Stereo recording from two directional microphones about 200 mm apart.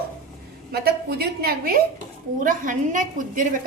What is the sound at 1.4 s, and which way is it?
A woman's voice, 50° right (ahead or behind).